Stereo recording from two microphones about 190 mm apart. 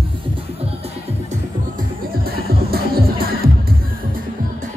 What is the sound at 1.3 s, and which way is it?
Music, 50° right (ahead or behind).